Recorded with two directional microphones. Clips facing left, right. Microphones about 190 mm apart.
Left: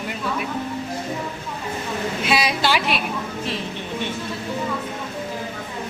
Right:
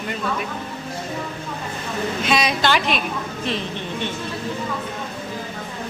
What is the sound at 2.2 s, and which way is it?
Speech, 5° left (ahead or behind).